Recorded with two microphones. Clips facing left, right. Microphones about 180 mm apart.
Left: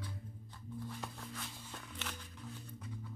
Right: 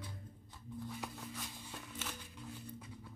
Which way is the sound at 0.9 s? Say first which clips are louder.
Right 1 dB; 5° right (ahead or behind).